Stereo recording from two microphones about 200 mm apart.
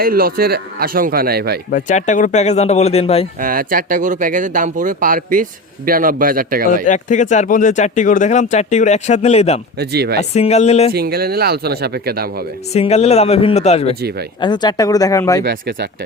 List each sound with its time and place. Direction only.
0.0 s speech: 45° right (ahead or behind)
1.7 s speech: 35° left (ahead or behind)
3.4 s speech: 45° right (ahead or behind)
6.8 s speech: 40° left (ahead or behind)
9.7 s speech: 55° right (ahead or behind)
10.2 s speech: 30° left (ahead or behind)
10.9 s speech: 50° right (ahead or behind)
12.7 s speech: 30° left (ahead or behind); by 15.4 s 15° left (ahead or behind)
15.4 s speech: 55° right (ahead or behind)